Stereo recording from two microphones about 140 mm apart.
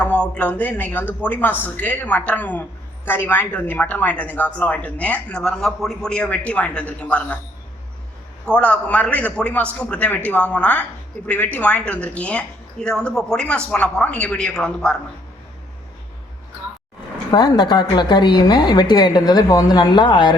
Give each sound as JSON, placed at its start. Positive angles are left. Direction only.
{"t": 0.0, "sound": "a woman's voice", "side_deg": 10}
{"t": 8.4, "sound": "a woman's voice", "side_deg": 10}
{"t": 17.3, "sound": "a woman's voice", "side_deg": 30}